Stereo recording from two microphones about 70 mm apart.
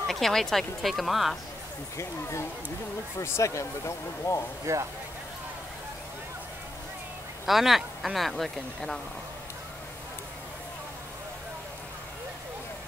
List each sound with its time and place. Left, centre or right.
0.1 s speech: centre
2.0 s speech: left
4.7 s speech: right
7.4 s speech: centre